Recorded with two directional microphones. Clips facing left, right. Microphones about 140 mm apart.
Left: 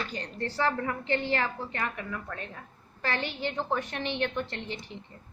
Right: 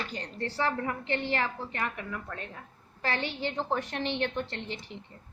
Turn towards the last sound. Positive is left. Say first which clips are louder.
# left 1 dB
turn(degrees=-30)  # may be behind; listen again after turning